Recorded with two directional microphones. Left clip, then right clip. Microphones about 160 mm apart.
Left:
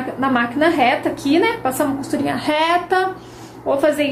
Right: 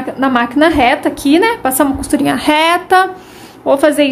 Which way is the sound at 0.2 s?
75° right (ahead or behind).